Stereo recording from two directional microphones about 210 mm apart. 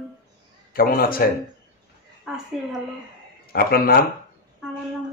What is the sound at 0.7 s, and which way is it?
Speech, 45° left (ahead or behind).